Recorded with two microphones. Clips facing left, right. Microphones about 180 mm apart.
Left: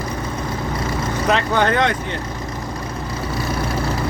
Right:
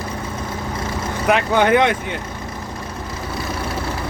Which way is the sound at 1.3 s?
10° right (ahead or behind).